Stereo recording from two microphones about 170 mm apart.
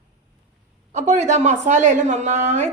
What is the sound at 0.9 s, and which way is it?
A woman's voice, 40° right (ahead or behind).